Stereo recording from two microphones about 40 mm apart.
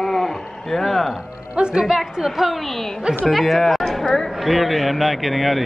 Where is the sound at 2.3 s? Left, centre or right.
Centre.